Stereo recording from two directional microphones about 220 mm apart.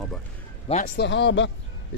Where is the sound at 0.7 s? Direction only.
35° left (ahead or behind).